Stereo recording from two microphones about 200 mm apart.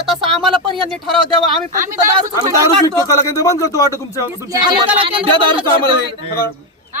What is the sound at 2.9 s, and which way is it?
Speech, 15° left (ahead or behind).